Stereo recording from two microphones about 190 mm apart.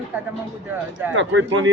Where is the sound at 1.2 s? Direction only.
75° right (ahead or behind).